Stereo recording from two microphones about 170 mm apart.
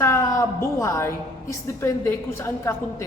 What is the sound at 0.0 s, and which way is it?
A woman's voice, 15° left (ahead or behind).